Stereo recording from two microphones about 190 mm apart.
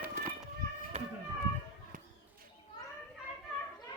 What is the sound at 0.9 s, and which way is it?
Children playing, 35° right (ahead or behind).